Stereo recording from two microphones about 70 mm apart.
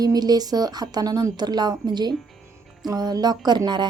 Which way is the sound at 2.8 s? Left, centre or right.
Right.